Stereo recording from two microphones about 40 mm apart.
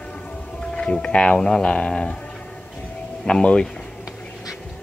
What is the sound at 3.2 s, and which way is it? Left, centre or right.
Speech, left.